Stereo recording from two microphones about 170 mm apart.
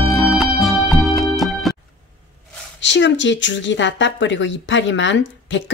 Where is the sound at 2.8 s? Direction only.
90° left.